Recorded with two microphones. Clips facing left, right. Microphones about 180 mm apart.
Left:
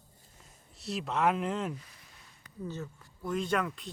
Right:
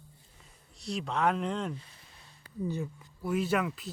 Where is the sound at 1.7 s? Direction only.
30° right (ahead or behind).